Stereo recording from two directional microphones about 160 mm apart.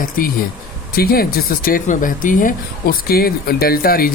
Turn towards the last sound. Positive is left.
turn(degrees=70)  # may be behind; listen again after turning